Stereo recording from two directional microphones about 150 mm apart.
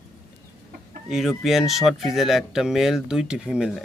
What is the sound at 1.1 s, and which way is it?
Speech, centre (ahead or behind).